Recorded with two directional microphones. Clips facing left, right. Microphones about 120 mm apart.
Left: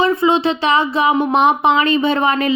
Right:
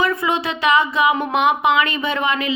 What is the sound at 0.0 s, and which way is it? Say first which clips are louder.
Speech: left 6 dB; 25° left (ahead or behind).